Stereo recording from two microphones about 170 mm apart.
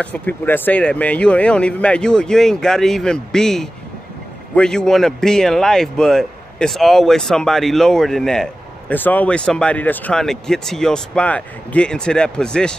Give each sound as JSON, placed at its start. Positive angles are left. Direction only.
{"t": 0.0, "sound": "a man's voice", "side_deg": 10}